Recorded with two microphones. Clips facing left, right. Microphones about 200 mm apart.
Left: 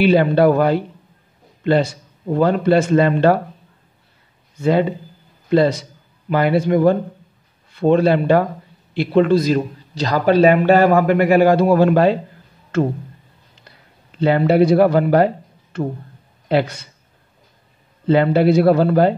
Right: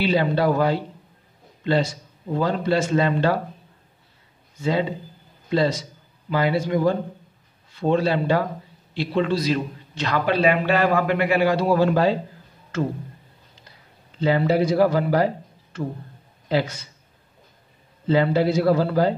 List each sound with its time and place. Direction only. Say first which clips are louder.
0.0 s a man's voice: left 7 dB; 55° left (ahead or behind)
4.6 s a man's voice: left 6 dB; 55° left (ahead or behind)
9.9 s a man's voice: left 7 dB; 35° left (ahead or behind); by 12.2 s 60° left (ahead or behind)
14.2 s speech: left 6 dB; 60° left (ahead or behind)
18.0 s a man's voice: left 5 dB; 60° left (ahead or behind)